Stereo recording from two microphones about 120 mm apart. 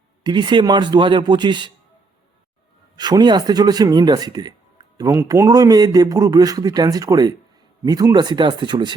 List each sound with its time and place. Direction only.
0.2 s speech: 40° right (ahead or behind)
3.0 s speech: 35° right (ahead or behind)